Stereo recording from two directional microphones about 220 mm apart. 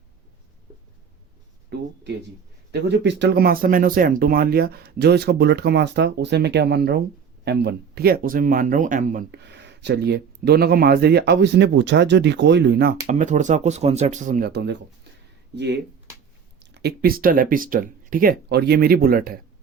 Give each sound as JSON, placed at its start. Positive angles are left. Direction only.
{"t": 1.7, "sound": "a sound", "side_deg": -50}
{"t": 2.7, "sound": "speech", "side_deg": -50}
{"t": 9.3, "sound": "speech", "side_deg": -50}